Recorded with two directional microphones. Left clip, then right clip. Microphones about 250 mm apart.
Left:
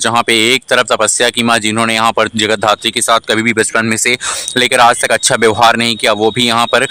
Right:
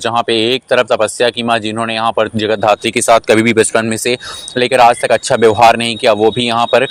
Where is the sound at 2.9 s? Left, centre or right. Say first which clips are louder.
Right 3 dB; centre.